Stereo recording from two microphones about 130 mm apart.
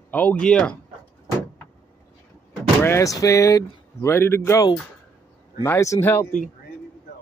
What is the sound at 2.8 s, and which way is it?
Speech, 20° left (ahead or behind).